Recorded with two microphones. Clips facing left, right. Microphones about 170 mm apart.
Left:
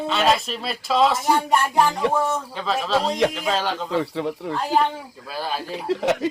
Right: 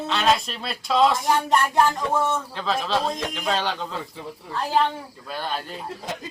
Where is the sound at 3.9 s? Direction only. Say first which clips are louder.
Left 10 dB; 75° left (ahead or behind).